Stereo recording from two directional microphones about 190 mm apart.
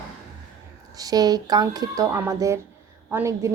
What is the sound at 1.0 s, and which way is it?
A woman's voice, 20° right (ahead or behind).